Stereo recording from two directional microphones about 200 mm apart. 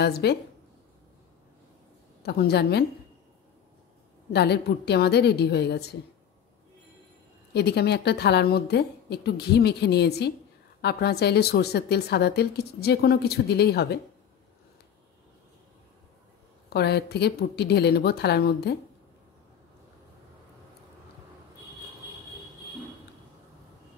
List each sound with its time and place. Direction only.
0.0 s a woman's voice: 55° left (ahead or behind)
2.2 s a woman's voice: 55° left (ahead or behind)
4.3 s a woman's voice: 55° left (ahead or behind)
7.5 s a woman's voice: 55° left (ahead or behind)
16.7 s a woman's voice: 55° left (ahead or behind)